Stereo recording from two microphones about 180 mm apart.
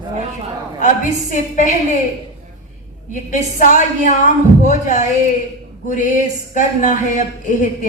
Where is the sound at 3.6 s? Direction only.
45° left (ahead or behind).